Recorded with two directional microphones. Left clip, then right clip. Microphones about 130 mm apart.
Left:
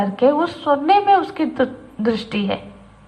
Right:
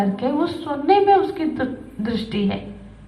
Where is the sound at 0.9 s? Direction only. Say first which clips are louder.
Right 1 dB; 35° left (ahead or behind).